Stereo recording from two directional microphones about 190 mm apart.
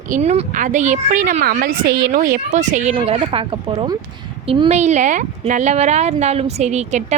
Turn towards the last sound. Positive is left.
turn(degrees=-35)  # may be behind; listen again after turning